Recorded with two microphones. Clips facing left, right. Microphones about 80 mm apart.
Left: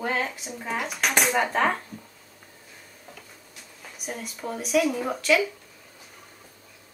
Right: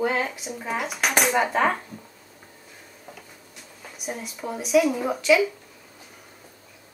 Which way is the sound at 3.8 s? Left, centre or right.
Centre.